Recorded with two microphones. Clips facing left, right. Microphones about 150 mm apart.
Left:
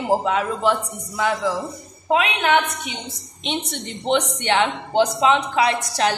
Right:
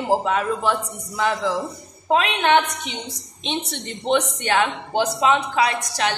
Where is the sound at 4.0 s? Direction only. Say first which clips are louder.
Even; 20° left (ahead or behind).